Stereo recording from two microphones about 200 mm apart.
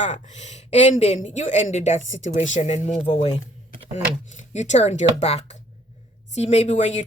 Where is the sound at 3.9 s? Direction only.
35° left (ahead or behind).